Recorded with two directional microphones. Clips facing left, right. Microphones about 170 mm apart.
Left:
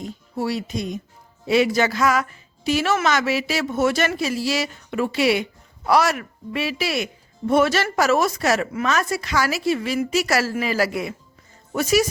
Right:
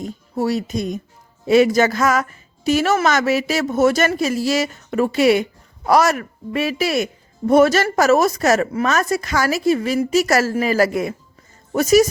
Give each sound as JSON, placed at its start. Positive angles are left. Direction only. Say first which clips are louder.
{"t": 0.0, "sound": "speech", "louder": "right 4 dB", "side_deg": -45}